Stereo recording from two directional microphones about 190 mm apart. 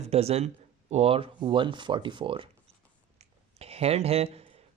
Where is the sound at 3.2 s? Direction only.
30° right (ahead or behind).